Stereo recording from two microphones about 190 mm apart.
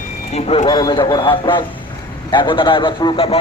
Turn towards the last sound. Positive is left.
turn(degrees=25)  # may be behind; listen again after turning